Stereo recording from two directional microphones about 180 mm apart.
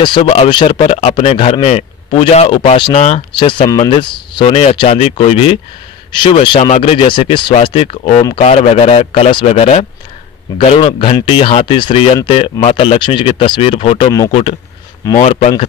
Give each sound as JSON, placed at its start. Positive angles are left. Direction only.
{"t": 0.0, "sound": "a man's voice", "side_deg": 30}
{"t": 8.2, "sound": "speech", "side_deg": 20}
{"t": 8.5, "sound": "a man's voice", "side_deg": 35}
{"t": 15.1, "sound": "a man's voice", "side_deg": 35}